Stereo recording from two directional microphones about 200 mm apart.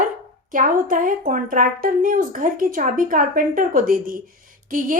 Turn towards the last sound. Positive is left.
turn(degrees=-45)  # may be behind; listen again after turning